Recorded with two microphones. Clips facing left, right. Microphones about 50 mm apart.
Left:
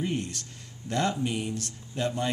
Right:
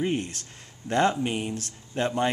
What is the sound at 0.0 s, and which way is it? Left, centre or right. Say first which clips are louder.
Speech: right 3 dB; right.